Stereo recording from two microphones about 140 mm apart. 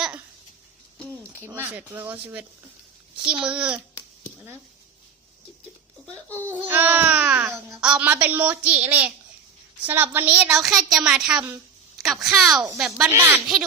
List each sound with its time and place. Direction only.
1.1 s a sound: 15° left (ahead or behind)
1.5 s a woman's voice: 15° right (ahead or behind)
6.4 s a woman's voice: 15° right (ahead or behind)
10.5 s a woman's voice: centre (ahead or behind)